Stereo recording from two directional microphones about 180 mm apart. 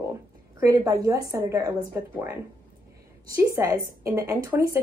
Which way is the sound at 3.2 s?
15° right (ahead or behind).